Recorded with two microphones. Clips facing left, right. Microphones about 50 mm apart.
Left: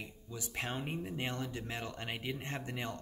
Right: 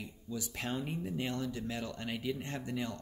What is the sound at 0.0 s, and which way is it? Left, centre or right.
Speech, left.